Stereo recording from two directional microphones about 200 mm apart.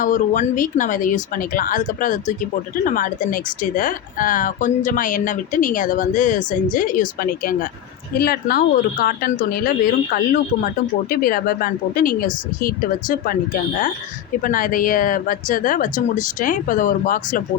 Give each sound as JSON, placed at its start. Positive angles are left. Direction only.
{"t": 0.0, "sound": "speech", "side_deg": 40}